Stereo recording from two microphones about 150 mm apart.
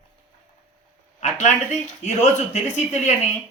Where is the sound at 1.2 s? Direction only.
50° left (ahead or behind).